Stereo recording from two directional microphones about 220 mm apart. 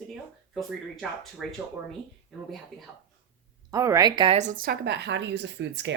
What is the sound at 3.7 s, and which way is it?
Speech, 15° right (ahead or behind).